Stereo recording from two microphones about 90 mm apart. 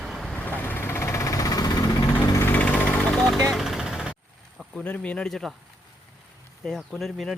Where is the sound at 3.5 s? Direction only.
5° right (ahead or behind).